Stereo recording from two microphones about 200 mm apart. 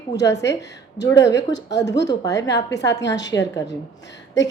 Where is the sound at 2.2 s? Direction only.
15° left (ahead or behind).